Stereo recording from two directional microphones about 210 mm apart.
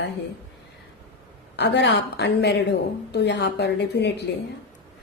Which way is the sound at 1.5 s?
55° left (ahead or behind).